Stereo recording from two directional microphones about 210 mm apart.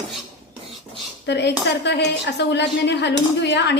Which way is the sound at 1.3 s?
55° left (ahead or behind).